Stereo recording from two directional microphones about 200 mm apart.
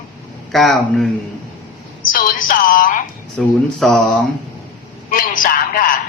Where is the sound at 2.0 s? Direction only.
45° left (ahead or behind).